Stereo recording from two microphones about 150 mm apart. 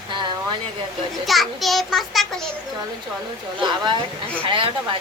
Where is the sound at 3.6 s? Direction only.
30° right (ahead or behind).